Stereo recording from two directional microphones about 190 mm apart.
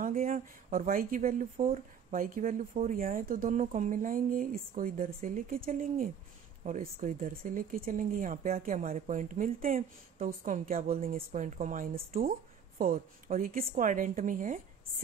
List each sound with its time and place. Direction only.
0.0 s speech: 45° right (ahead or behind)